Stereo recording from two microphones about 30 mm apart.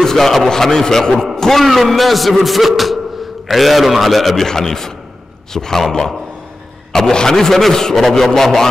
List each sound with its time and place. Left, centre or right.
0.0 s a man's voice: centre
1.6 s a man's voice: centre